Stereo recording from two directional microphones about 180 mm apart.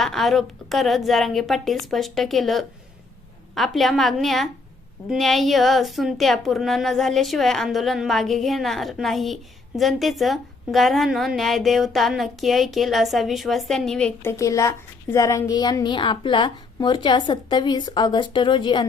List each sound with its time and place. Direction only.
0.0 s speech: centre (ahead or behind)
14.2 s a child's voice: 15° left (ahead or behind)